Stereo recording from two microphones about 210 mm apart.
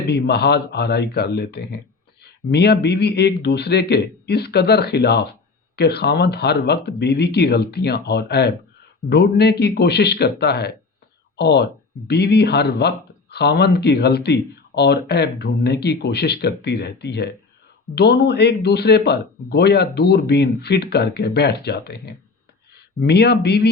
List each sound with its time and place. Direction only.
0.1 s speech: 50° left (ahead or behind)